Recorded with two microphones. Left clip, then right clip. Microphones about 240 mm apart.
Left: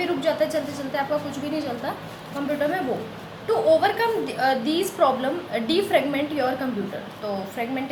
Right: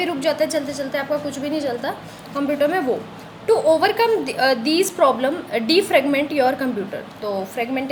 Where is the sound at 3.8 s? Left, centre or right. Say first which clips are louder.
Right 4 dB; right.